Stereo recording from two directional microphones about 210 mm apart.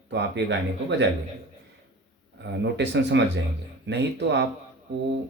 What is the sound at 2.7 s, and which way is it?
Speech, 55° right (ahead or behind).